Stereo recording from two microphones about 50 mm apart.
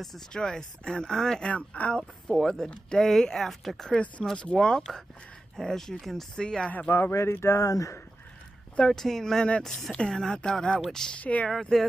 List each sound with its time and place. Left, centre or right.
0.3 s speech: centre
1.5 s speech: left; by 4.0 s centre
4.4 s speech: centre
6.4 s speech: centre
7.2 s speech: left
8.9 s speech: centre
11.1 s speech: left
11.7 s speech: centre